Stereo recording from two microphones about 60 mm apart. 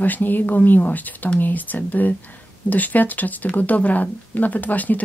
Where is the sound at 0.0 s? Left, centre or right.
Left.